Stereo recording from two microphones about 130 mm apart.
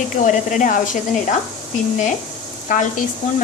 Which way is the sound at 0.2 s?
75° left (ahead or behind).